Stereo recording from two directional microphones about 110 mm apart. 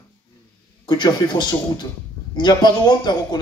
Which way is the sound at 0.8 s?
40° left (ahead or behind).